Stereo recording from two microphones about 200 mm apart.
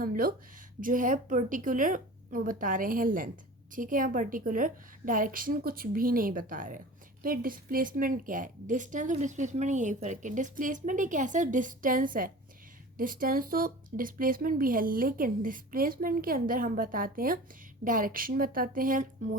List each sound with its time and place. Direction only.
0.0 s a woman's voice: 45° right (ahead or behind)